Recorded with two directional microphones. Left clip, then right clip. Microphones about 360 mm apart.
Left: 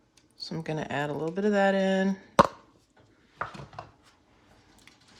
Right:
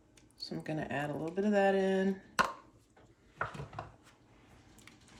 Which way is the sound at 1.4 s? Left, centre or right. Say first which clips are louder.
Left 4 dB; centre.